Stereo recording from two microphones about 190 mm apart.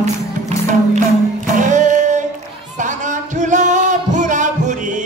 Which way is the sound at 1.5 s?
40° right (ahead or behind).